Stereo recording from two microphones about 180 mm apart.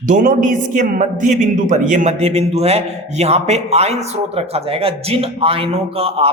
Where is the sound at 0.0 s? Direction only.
45° right (ahead or behind).